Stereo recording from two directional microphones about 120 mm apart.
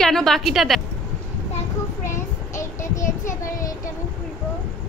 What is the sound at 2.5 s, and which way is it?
Child singing, 25° left (ahead or behind).